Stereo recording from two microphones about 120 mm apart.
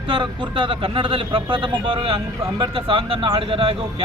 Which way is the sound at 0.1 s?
45° right (ahead or behind).